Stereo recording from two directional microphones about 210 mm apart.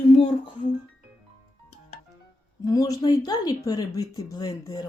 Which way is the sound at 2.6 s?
15° left (ahead or behind).